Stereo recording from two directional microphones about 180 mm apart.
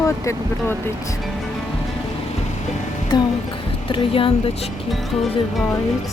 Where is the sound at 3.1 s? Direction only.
25° left (ahead or behind).